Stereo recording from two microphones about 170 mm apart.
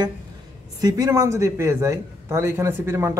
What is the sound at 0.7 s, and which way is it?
A man's voice, 20° right (ahead or behind).